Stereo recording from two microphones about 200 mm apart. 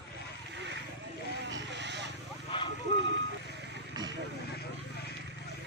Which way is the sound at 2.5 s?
25° left (ahead or behind).